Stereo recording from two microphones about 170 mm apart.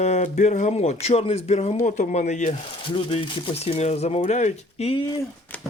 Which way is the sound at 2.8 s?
30° left (ahead or behind).